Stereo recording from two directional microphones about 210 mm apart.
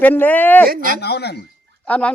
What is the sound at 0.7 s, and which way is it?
Speech, 40° right (ahead or behind).